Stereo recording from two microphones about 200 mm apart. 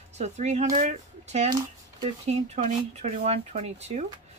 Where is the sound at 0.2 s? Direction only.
35° right (ahead or behind).